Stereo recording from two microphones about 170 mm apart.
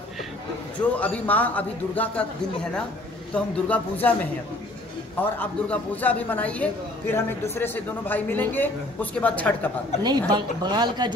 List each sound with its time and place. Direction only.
0.9 s a man's voice: 10° left (ahead or behind)
5.2 s a man's voice: 10° left (ahead or behind)
10.0 s speech: 25° right (ahead or behind)